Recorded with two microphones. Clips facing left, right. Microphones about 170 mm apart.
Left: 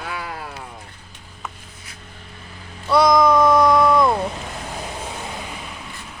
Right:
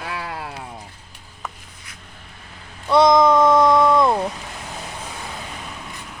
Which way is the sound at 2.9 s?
25° right (ahead or behind).